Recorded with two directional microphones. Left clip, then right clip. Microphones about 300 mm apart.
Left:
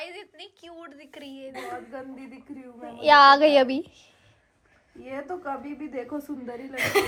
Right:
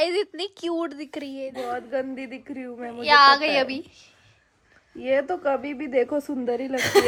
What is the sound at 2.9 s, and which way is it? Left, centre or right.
A woman's voice, centre.